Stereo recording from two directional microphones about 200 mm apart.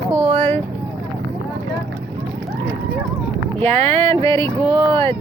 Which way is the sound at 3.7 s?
30° right (ahead or behind).